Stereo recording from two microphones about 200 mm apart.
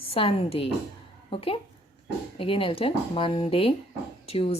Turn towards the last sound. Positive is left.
turn(degrees=30)  # may be behind; listen again after turning